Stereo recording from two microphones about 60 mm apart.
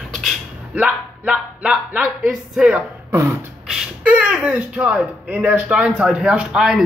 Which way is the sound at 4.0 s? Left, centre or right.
Centre.